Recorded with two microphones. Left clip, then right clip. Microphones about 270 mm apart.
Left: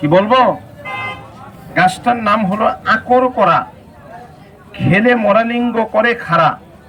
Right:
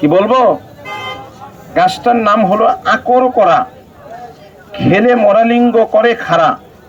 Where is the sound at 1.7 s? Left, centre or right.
Centre.